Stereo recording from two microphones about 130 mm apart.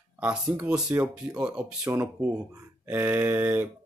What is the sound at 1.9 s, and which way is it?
Speech, 25° right (ahead or behind).